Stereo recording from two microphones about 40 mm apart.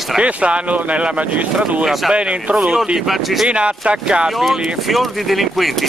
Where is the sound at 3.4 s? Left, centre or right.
Right.